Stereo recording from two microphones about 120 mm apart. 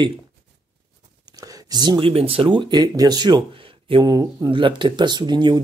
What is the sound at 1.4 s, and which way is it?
Speech, 30° right (ahead or behind).